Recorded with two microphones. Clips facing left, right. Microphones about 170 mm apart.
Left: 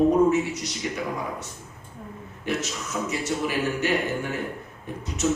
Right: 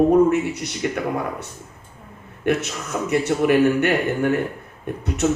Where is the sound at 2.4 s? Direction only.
60° right (ahead or behind).